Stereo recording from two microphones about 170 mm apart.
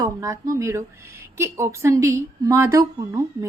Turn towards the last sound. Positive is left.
turn(degrees=-15)  # may be behind; listen again after turning